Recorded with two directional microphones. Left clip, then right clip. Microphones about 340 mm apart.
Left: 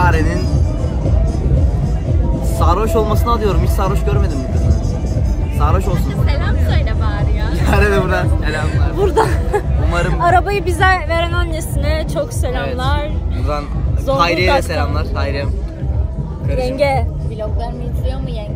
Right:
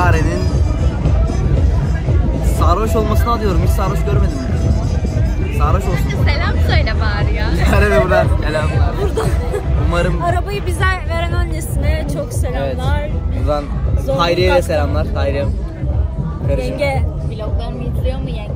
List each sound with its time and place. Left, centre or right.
0.0 s music: centre
2.6 s speech: centre
5.6 s speech: centre
6.2 s speech: right
7.6 s speech: centre
9.0 s speech: left
9.8 s a man's voice: centre
10.2 s speech: left
14.1 s speech: centre
16.7 s speech: centre